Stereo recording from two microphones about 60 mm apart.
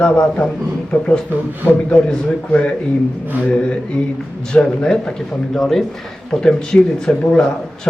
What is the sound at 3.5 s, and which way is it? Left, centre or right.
Speech, centre.